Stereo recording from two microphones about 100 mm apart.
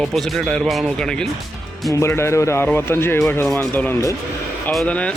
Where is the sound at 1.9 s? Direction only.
25° left (ahead or behind); by 5.1 s 10° left (ahead or behind).